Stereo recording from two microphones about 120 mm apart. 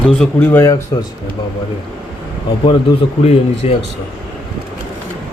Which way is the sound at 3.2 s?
60° left (ahead or behind).